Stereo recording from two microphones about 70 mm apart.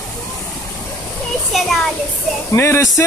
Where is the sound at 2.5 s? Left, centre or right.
Left.